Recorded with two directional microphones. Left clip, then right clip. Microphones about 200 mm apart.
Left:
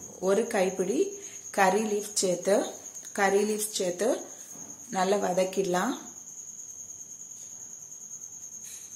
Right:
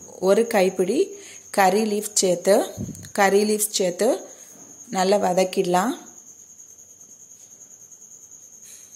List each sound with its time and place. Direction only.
0.2 s a woman's voice: 35° right (ahead or behind)